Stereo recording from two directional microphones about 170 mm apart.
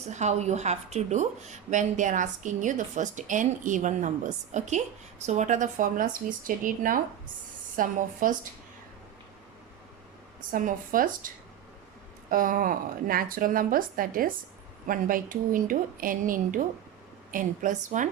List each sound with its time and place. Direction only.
0.1 s a woman's voice: 45° right (ahead or behind)
10.5 s a woman's voice: 55° right (ahead or behind)
12.3 s a woman's voice: 55° right (ahead or behind)